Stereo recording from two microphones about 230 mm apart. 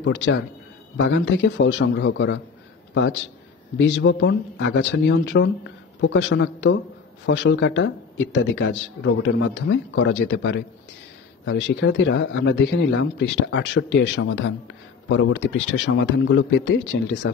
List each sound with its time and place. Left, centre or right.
0.0 s a man's voice: left